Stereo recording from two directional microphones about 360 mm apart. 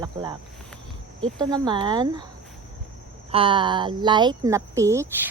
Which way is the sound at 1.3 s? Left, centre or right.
Centre.